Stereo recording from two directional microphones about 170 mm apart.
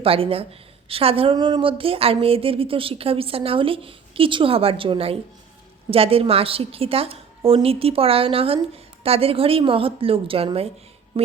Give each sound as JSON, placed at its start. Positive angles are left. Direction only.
{"t": 0.0, "sound": "a woman's voice", "side_deg": -35}